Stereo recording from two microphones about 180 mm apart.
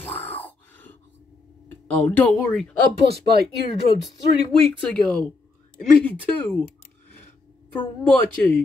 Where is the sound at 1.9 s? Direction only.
10° left (ahead or behind).